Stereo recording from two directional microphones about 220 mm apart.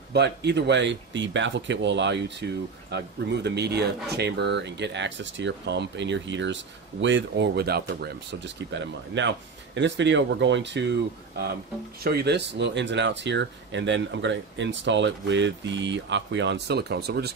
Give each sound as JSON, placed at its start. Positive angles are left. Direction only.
{"t": 0.1, "sound": "speech", "side_deg": -50}
{"t": 12.0, "sound": "speech", "side_deg": -45}